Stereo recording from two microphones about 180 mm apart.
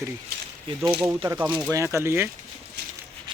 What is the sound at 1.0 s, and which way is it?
Speech, 15° right (ahead or behind).